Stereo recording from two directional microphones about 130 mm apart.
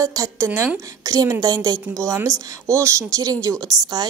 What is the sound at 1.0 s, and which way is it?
A woman's voice, 30° right (ahead or behind).